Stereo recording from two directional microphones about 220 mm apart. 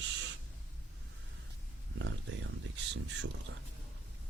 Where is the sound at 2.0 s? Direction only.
60° right (ahead or behind).